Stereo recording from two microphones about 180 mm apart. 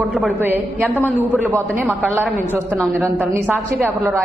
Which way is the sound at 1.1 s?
10° right (ahead or behind).